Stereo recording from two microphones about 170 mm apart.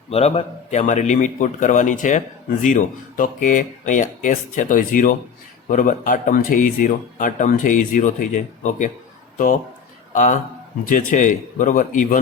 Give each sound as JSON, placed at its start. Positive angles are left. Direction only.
{"t": 0.1, "sound": "speech", "side_deg": 40}
{"t": 10.1, "sound": "a man's voice", "side_deg": 45}